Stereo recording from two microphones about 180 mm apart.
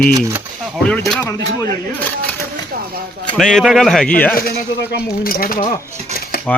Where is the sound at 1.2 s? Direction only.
20° left (ahead or behind).